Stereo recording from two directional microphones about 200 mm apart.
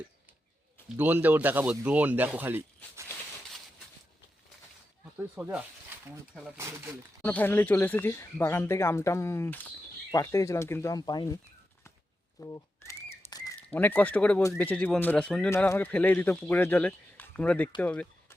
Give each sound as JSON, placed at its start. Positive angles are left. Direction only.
{"t": 0.9, "sound": "speech", "side_deg": -10}
{"t": 5.1, "sound": "speech", "side_deg": -5}
{"t": 7.3, "sound": "speech", "side_deg": 10}
{"t": 12.4, "sound": "bird", "side_deg": 15}
{"t": 13.6, "sound": "speech", "side_deg": 10}